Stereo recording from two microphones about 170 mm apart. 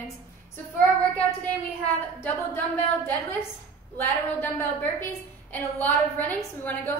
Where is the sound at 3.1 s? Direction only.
15° left (ahead or behind).